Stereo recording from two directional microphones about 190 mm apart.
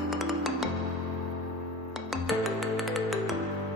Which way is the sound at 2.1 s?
Centre (ahead or behind).